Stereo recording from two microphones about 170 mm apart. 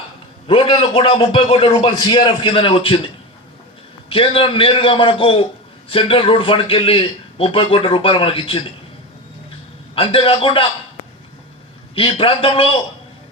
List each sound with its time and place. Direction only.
0.4 s a man's voice: 30° left (ahead or behind)
4.1 s a man's voice: 30° left (ahead or behind)
9.9 s a man's voice: 30° left (ahead or behind)
11.9 s a man's voice: 30° left (ahead or behind)